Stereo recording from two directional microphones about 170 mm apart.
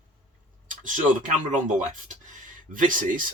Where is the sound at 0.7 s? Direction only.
50° right (ahead or behind).